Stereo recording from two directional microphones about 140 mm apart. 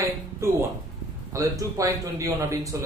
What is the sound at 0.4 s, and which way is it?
A man's voice, 20° right (ahead or behind).